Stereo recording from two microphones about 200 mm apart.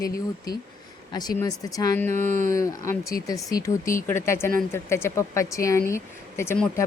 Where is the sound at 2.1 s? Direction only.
40° right (ahead or behind).